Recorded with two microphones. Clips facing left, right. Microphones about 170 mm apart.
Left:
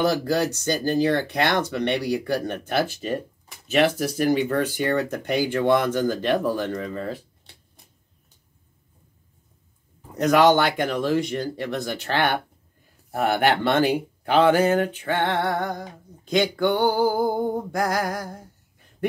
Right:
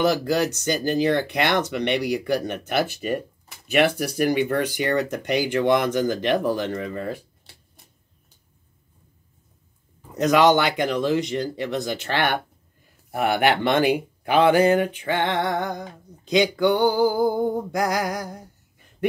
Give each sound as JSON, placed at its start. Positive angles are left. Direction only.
{"t": 0.0, "sound": "speech", "side_deg": -15}
{"t": 7.5, "sound": "shuffling cards", "side_deg": -5}
{"t": 10.1, "sound": "speech", "side_deg": -20}